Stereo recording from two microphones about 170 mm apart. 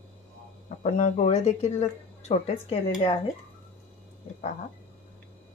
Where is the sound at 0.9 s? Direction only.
45° left (ahead or behind).